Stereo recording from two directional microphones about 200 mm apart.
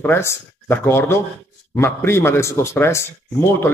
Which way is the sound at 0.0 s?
10° left (ahead or behind).